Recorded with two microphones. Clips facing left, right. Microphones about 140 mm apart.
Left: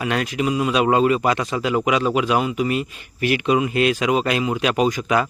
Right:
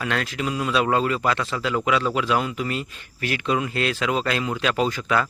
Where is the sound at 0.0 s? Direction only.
15° left (ahead or behind).